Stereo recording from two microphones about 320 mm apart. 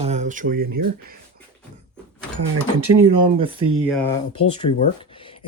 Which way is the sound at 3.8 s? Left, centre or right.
Centre.